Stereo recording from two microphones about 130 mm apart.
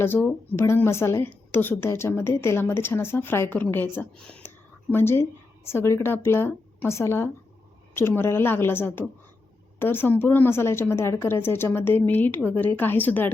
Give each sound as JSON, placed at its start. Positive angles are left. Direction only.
{"t": 0.0, "sound": "a woman's voice", "side_deg": 20}